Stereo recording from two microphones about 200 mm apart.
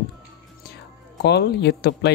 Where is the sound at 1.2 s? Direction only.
60° left (ahead or behind).